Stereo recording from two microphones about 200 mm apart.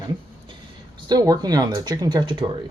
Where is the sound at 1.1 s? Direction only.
20° right (ahead or behind).